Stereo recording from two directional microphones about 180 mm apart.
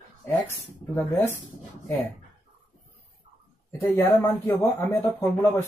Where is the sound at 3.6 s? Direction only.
15° left (ahead or behind).